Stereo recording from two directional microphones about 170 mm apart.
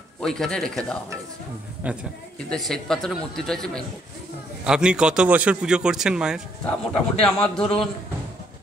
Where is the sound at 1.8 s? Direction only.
10° right (ahead or behind).